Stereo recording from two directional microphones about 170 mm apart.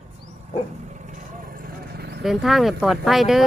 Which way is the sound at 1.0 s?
50° right (ahead or behind).